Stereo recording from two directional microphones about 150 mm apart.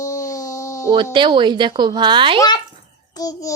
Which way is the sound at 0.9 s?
30° right (ahead or behind).